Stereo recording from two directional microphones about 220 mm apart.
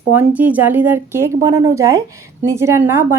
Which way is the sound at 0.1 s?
10° right (ahead or behind).